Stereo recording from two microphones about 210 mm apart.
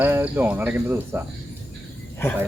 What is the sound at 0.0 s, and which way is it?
Speech, 10° right (ahead or behind).